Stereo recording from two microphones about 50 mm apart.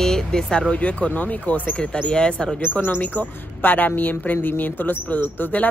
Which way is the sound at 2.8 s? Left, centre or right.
Left.